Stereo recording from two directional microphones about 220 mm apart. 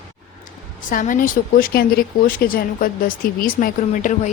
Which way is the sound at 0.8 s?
35° left (ahead or behind).